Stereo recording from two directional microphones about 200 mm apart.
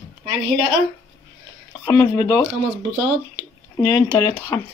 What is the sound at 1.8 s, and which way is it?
Speech, 15° left (ahead or behind).